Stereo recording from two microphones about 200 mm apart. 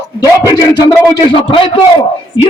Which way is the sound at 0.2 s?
20° left (ahead or behind).